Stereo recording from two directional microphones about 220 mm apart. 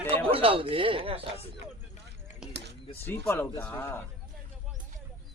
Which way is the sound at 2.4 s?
5° right (ahead or behind).